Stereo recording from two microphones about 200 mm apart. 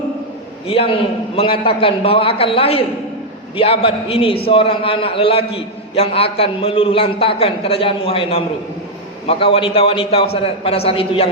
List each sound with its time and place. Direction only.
0.7 s a man's voice: 25° left (ahead or behind)